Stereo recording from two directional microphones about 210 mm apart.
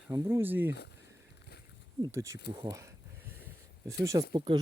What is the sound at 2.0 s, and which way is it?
Speech, 15° right (ahead or behind).